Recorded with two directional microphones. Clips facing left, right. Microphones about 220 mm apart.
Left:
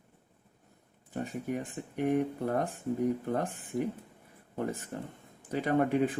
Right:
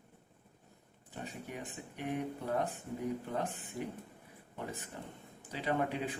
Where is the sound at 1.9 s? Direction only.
45° left (ahead or behind).